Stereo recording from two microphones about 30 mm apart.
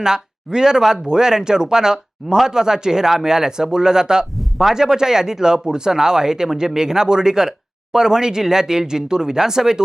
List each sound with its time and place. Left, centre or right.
0.0 s speech: right
4.5 s speech: centre